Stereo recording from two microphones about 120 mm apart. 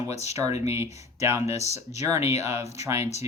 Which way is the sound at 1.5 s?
65° left (ahead or behind).